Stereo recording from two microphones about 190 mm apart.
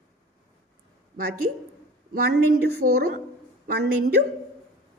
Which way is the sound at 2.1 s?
55° right (ahead or behind).